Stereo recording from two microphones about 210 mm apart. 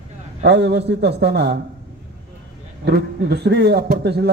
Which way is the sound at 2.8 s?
50° right (ahead or behind).